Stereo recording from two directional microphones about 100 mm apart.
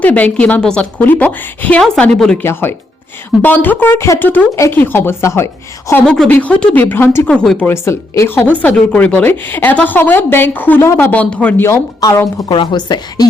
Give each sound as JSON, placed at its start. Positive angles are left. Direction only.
{"t": 0.0, "sound": "a woman's voice", "side_deg": 15}
{"t": 1.8, "sound": "speech", "side_deg": 5}
{"t": 2.4, "sound": "speech", "side_deg": 25}
{"t": 6.1, "sound": "a woman's voice", "side_deg": 10}
{"t": 7.3, "sound": "a woman's voice", "side_deg": 5}
{"t": 7.7, "sound": "speech", "side_deg": 30}
{"t": 8.5, "sound": "a woman's voice", "side_deg": 15}
{"t": 11.9, "sound": "speech", "side_deg": 35}
{"t": 12.4, "sound": "a woman's voice", "side_deg": 50}